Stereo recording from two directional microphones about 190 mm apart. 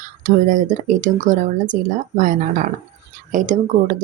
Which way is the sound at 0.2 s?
45° right (ahead or behind).